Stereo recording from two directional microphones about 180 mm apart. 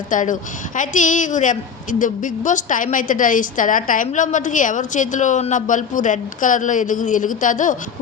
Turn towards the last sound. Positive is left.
turn(degrees=45)  # may be behind; listen again after turning